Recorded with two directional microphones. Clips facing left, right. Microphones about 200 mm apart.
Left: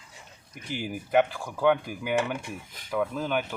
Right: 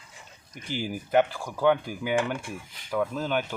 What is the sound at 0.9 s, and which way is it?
Speech, centre (ahead or behind).